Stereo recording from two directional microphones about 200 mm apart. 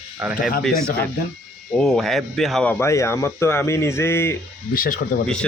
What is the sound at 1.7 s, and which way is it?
Speech, centre (ahead or behind).